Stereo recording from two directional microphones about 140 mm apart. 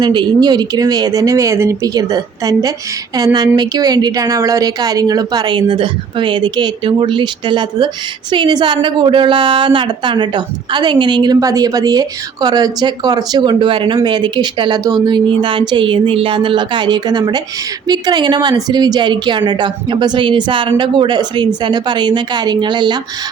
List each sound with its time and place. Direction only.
0.0 s a woman's voice: 30° right (ahead or behind)